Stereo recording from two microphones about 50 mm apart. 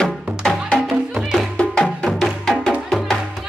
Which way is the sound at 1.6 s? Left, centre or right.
Centre.